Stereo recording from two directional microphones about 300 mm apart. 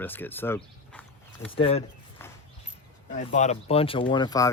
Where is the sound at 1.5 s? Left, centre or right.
Centre.